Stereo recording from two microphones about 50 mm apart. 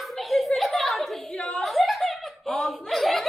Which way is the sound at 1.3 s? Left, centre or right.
Left.